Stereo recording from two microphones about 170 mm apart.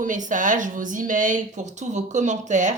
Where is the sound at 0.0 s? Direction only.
50° right (ahead or behind).